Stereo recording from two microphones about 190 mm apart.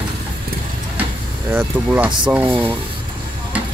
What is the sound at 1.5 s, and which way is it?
Speech, 10° right (ahead or behind).